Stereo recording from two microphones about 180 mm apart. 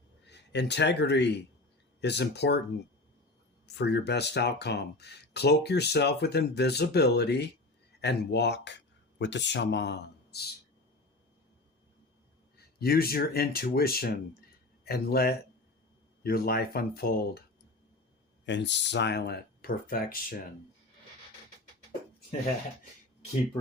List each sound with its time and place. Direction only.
0.3 s speech: 70° left (ahead or behind)
3.8 s speech: 70° left (ahead or behind)
12.5 s speech: 60° left (ahead or behind)
18.4 s speech: 75° left (ahead or behind); by 20.1 s 55° left (ahead or behind)